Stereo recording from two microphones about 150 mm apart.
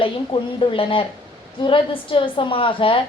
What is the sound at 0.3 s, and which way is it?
A woman's voice, 35° left (ahead or behind).